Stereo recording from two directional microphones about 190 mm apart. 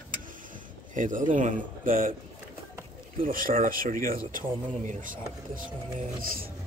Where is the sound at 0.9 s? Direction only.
45° right (ahead or behind).